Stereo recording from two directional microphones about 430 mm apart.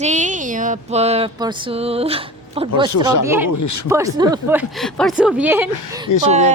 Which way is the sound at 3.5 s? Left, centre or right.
Left.